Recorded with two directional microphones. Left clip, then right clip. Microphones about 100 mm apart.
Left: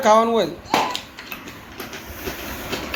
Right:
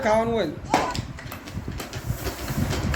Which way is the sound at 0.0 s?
5° left (ahead or behind).